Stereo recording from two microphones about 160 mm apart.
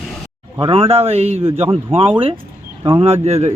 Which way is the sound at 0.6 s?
35° right (ahead or behind).